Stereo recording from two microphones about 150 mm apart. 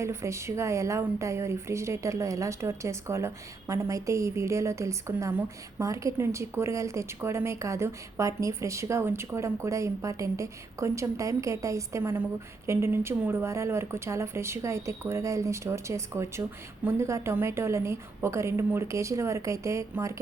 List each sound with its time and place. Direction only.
0.0 s a woman's voice: 20° right (ahead or behind)